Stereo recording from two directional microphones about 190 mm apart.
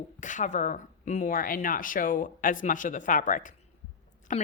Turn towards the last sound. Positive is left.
turn(degrees=40)  # may be behind; listen again after turning